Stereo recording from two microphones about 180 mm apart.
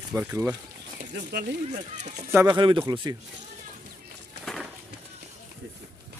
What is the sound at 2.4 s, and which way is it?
Speech, 25° right (ahead or behind).